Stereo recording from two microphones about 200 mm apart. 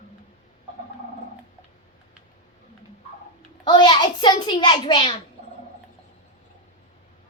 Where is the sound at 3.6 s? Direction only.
20° left (ahead or behind).